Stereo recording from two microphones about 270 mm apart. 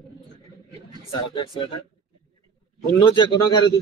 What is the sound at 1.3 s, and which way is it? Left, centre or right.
Speech, centre.